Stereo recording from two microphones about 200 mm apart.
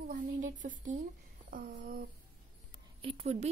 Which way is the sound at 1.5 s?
45° right (ahead or behind).